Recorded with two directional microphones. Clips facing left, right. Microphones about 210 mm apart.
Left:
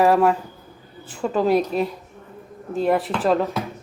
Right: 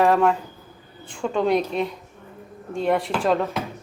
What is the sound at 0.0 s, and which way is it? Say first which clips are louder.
Speech: left 2 dB; 5° left (ahead or behind).